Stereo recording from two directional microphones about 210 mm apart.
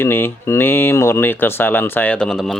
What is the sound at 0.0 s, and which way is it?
Speech, 10° left (ahead or behind).